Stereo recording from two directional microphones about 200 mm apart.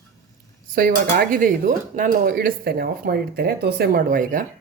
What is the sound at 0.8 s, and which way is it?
Speech, 50° right (ahead or behind).